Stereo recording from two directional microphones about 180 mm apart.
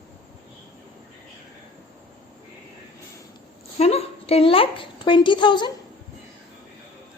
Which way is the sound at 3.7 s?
35° left (ahead or behind).